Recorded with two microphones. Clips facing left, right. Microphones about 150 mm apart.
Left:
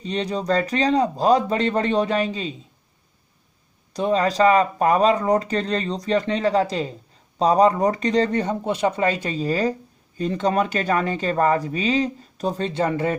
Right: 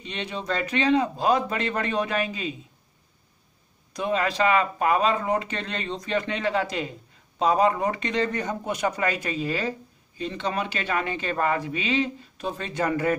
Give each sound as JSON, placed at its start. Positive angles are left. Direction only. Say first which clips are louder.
{"t": 0.0, "sound": "speech", "louder": "left 8 dB", "side_deg": 40}
{"t": 3.9, "sound": "speech", "louder": "left 5 dB", "side_deg": 35}